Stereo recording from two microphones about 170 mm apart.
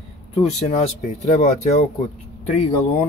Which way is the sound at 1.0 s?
45° left (ahead or behind).